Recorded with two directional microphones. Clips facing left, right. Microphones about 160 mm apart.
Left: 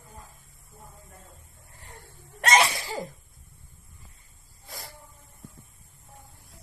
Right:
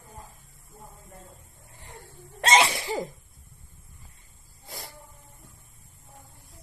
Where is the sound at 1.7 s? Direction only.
20° right (ahead or behind).